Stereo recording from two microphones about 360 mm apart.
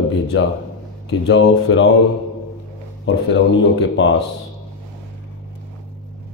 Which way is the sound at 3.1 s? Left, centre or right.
Left.